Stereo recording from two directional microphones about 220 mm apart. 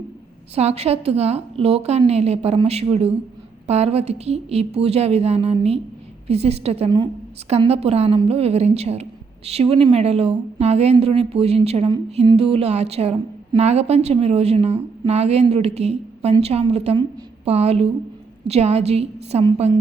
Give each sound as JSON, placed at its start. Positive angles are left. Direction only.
{"t": 0.5, "sound": "a woman's voice", "side_deg": -30}